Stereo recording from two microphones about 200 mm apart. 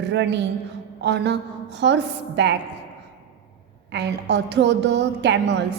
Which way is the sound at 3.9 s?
60° right (ahead or behind).